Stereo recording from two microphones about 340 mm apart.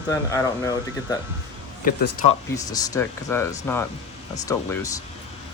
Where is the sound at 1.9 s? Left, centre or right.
Left.